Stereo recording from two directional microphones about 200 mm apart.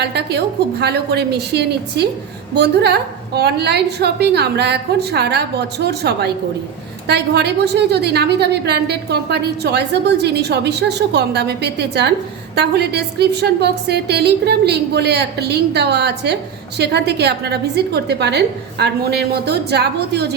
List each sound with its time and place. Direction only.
0.0 s a woman's voice: 55° right (ahead or behind)